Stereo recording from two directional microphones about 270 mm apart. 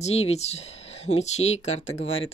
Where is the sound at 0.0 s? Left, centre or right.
Left.